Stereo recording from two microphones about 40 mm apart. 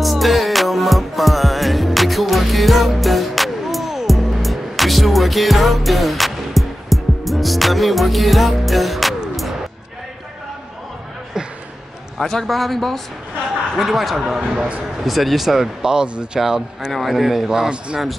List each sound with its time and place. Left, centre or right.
0.0 s music: centre
11.4 s a sound: centre
12.2 s speech: centre
17.6 s speech: right